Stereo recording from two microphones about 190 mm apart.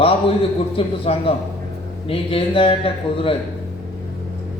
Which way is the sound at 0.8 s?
30° left (ahead or behind).